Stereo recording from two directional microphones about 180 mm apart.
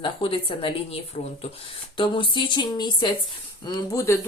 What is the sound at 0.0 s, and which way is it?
Speech, 30° left (ahead or behind).